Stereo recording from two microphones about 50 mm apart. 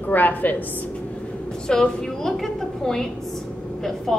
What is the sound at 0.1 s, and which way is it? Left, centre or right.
Speech, left.